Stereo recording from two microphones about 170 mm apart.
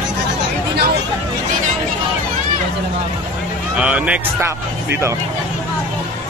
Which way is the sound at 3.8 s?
5° right (ahead or behind).